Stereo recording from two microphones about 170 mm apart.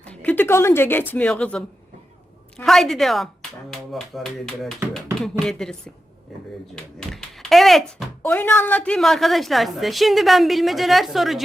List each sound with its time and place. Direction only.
0.0 s a sound: 10° left (ahead or behind)
1.1 s a woman's voice: 5° left (ahead or behind)
7.1 s speech: centre (ahead or behind)